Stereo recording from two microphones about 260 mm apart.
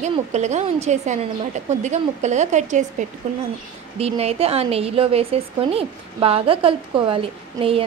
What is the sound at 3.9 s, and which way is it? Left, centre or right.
A woman's voice, right.